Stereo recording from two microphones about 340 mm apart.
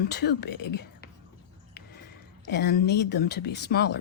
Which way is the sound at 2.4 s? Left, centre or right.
Left.